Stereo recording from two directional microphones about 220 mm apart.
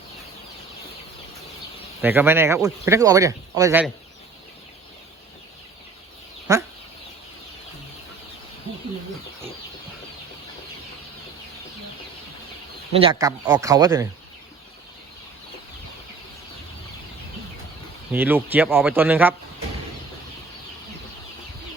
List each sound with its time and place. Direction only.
2.0 s speech: 10° right (ahead or behind)
6.5 s speech: 15° right (ahead or behind)
12.9 s speech: 25° right (ahead or behind)
18.1 s speech: 10° right (ahead or behind)